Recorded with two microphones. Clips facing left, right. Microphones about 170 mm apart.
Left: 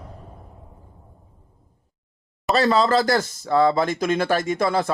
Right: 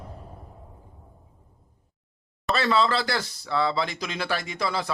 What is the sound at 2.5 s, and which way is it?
Speech, 40° left (ahead or behind).